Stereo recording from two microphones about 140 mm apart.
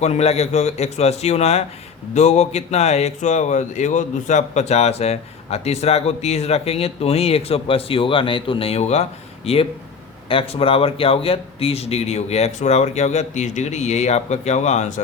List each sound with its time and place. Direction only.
0.0 s speech: 50° left (ahead or behind)